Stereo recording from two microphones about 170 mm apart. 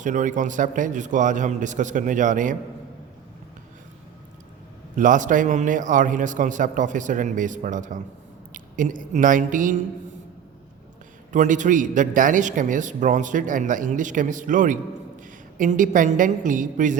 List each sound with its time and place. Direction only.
0.0 s a man's voice: 50° right (ahead or behind)
4.9 s a man's voice: 50° right (ahead or behind)
11.3 s a man's voice: 50° right (ahead or behind)